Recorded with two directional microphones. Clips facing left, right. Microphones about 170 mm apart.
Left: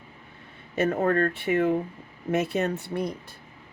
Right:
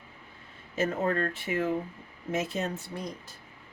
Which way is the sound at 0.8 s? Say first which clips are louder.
Left 5 dB; 55° left (ahead or behind).